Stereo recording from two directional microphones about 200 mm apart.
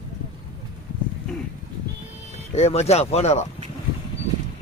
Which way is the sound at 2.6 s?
30° left (ahead or behind).